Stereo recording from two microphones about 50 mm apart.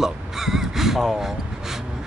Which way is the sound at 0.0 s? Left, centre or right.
Centre.